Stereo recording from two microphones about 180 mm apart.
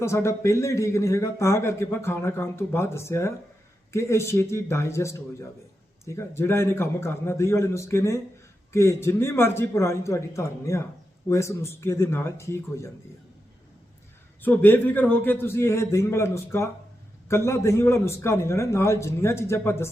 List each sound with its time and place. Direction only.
0.0 s speech: 15° left (ahead or behind)
14.4 s speech: 10° left (ahead or behind)